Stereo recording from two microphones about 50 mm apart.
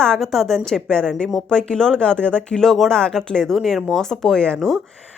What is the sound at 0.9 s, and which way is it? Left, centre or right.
Speech, centre.